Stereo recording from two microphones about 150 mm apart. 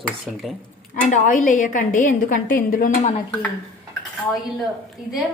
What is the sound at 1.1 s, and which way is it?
A woman's voice, 55° left (ahead or behind).